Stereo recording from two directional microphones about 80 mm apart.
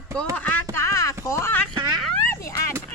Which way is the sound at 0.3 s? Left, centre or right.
Centre.